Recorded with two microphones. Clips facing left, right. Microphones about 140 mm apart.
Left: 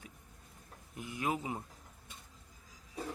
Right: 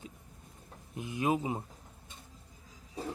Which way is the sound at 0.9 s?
20° right (ahead or behind).